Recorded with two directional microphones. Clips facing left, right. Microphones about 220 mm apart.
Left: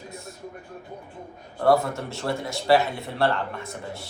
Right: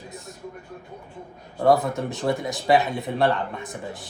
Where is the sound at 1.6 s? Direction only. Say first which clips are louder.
Right 1 dB; 20° right (ahead or behind).